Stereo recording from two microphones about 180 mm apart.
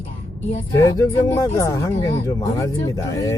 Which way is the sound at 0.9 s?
15° left (ahead or behind).